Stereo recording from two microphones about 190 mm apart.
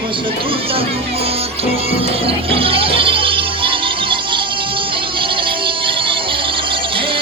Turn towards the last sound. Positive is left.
turn(degrees=-25)  # may be behind; listen again after turning